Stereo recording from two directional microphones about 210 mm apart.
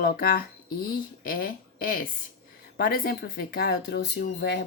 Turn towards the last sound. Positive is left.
turn(degrees=50)  # may be behind; listen again after turning